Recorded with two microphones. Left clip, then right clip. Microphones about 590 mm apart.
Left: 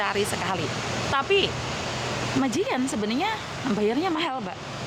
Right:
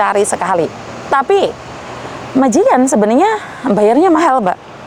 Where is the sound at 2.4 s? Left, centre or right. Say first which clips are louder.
Right 18 dB; right.